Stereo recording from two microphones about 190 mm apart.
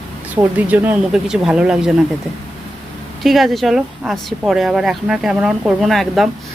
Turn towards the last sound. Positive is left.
turn(degrees=0)  # may be behind; listen again after turning